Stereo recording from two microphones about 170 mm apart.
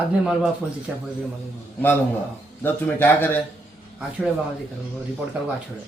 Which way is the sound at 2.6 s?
10° left (ahead or behind).